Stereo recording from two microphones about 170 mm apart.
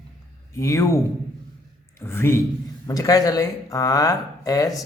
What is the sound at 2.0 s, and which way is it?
A man's voice, 15° left (ahead or behind).